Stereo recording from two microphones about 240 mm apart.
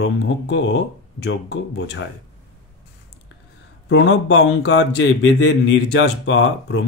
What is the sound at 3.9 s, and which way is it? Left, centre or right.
Speech, left.